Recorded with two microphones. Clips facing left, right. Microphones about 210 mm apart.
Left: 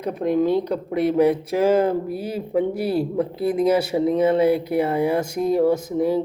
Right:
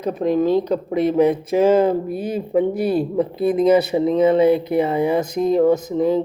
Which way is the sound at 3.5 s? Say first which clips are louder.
Right 4 dB; 10° left (ahead or behind).